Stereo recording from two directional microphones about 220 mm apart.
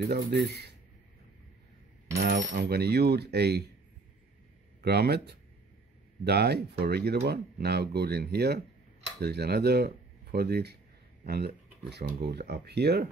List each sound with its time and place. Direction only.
0.0 s speech: 50° right (ahead or behind)
2.1 s speech: 40° right (ahead or behind)
4.8 s speech: 45° right (ahead or behind)